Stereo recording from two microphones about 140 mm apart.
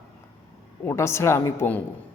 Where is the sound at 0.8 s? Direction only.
20° left (ahead or behind).